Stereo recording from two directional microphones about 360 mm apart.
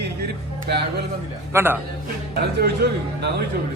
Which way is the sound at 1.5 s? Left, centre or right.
Centre.